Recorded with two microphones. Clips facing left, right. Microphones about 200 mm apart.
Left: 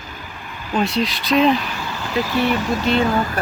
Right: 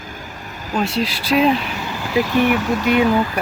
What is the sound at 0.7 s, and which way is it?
Speech, 5° right (ahead or behind).